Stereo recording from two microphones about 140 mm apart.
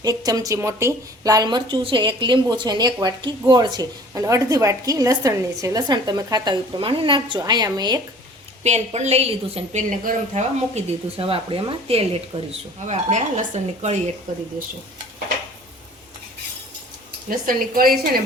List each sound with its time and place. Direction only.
0.0 s a woman's voice: 25° right (ahead or behind)
8.6 s speech: 55° right (ahead or behind)
10.0 s speech: 65° right (ahead or behind); by 12.0 s 40° right (ahead or behind)
12.5 s speech: 55° right (ahead or behind)
14.3 s speech: 65° right (ahead or behind)
17.2 s a woman's voice: 85° right